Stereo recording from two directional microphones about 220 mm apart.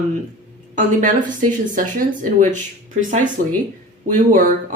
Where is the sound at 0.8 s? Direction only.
35° right (ahead or behind).